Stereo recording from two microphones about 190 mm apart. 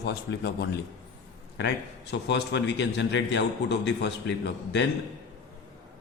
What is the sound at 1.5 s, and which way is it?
A man's voice, 65° left (ahead or behind).